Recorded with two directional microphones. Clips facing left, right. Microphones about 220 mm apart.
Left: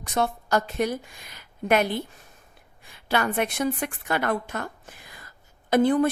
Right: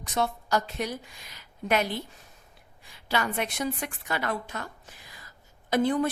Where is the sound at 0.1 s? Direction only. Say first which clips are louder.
Left 3 dB; 55° left (ahead or behind).